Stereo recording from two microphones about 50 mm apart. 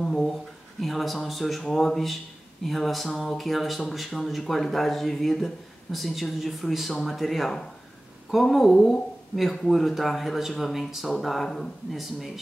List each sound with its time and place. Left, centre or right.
0.0 s speech: centre